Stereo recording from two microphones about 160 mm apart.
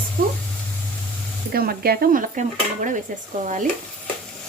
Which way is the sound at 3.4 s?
50° right (ahead or behind).